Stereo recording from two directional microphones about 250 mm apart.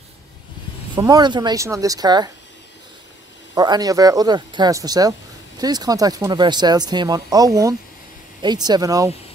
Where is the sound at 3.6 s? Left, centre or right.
Centre.